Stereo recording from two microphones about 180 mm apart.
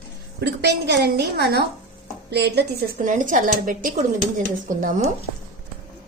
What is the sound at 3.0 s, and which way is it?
A woman's voice, 45° right (ahead or behind).